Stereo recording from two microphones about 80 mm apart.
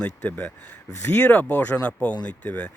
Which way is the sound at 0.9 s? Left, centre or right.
Left.